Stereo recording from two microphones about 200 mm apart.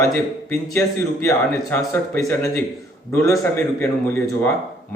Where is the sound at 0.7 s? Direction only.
10° left (ahead or behind).